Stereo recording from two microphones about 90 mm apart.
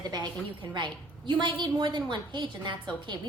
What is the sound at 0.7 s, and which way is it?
A woman's voice, 60° right (ahead or behind).